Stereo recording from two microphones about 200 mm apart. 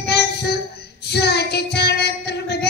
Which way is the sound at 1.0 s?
55° left (ahead or behind).